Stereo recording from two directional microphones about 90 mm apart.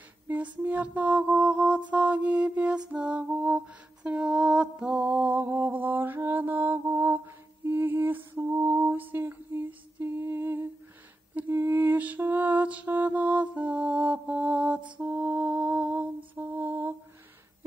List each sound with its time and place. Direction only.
0.3 s mantra: 15° right (ahead or behind)
11.3 s lullaby: 25° right (ahead or behind)
15.0 s mantra: 15° right (ahead or behind)